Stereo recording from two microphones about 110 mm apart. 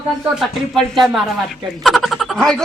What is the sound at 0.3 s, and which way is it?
Speech, centre (ahead or behind).